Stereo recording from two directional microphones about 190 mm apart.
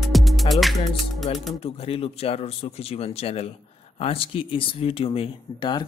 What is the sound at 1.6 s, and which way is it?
Speech, 30° left (ahead or behind).